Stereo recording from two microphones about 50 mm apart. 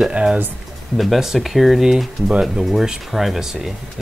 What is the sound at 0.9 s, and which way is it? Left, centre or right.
Speech, centre.